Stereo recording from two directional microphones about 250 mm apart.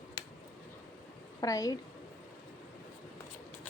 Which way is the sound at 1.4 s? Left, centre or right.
Centre.